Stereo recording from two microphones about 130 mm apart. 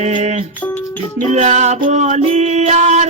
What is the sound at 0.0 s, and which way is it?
Music, 60° right (ahead or behind).